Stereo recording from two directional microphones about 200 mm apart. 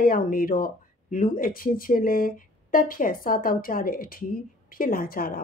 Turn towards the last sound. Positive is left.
turn(degrees=45)  # may be behind; listen again after turning